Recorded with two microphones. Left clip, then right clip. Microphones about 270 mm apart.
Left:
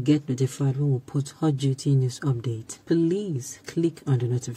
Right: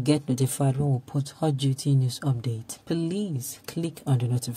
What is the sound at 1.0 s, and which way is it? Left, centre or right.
Speech, centre.